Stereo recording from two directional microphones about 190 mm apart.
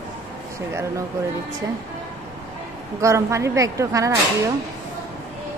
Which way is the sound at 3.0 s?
15° right (ahead or behind).